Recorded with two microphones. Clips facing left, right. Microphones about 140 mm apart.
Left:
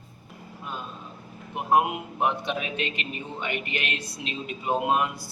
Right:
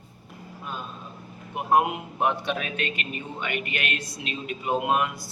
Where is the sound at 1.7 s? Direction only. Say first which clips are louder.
Even; 20° left (ahead or behind).